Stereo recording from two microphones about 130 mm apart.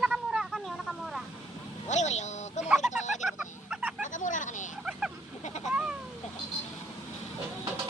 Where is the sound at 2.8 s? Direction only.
65° left (ahead or behind).